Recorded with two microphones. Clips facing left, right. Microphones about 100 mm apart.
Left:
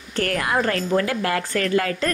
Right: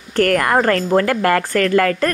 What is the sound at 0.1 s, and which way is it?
Speech, 55° right (ahead or behind).